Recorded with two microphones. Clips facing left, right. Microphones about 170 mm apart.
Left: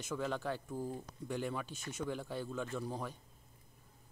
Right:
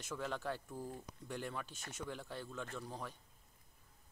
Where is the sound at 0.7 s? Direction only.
20° left (ahead or behind).